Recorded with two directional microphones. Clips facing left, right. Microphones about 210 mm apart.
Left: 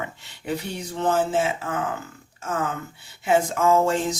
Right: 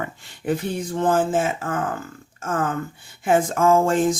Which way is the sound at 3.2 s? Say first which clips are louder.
Right 2 dB; 50° right (ahead or behind).